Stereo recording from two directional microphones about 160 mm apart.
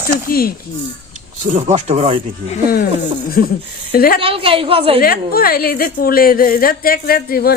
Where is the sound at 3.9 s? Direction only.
65° left (ahead or behind).